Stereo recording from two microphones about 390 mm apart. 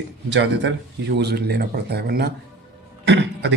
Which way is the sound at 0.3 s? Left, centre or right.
Right.